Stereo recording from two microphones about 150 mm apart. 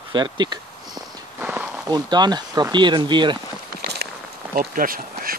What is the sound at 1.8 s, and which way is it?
Speech, 30° right (ahead or behind).